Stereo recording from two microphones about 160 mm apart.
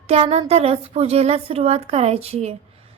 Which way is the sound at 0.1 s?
40° right (ahead or behind).